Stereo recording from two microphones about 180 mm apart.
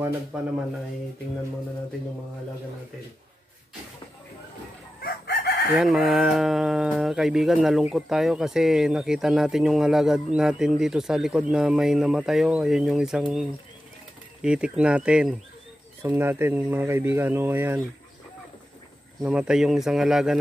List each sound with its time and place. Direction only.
0.3 s speech: 5° right (ahead or behind)
5.0 s chicken: 60° left (ahead or behind)
5.8 s speech: centre (ahead or behind)
19.2 s speech: 5° right (ahead or behind)